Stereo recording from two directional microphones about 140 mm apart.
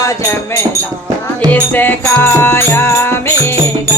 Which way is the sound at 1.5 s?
10° left (ahead or behind).